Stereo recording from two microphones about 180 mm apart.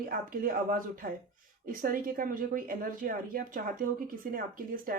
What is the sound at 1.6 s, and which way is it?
Speech, 50° right (ahead or behind).